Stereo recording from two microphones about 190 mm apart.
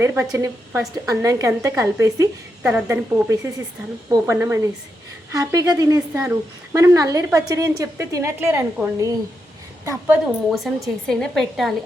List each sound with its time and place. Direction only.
0.0 s a woman's voice: 15° right (ahead or behind)
10.8 s a woman's voice: centre (ahead or behind)